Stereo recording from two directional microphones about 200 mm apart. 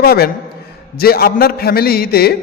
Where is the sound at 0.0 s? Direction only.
50° left (ahead or behind).